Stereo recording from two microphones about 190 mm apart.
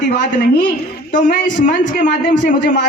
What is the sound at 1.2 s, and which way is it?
A woman's voice, 45° left (ahead or behind).